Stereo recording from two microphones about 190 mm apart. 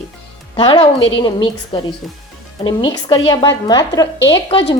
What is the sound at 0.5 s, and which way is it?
Speech, 25° left (ahead or behind).